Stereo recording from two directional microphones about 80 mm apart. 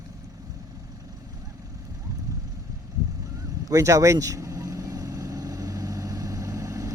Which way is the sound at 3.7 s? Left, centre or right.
Right.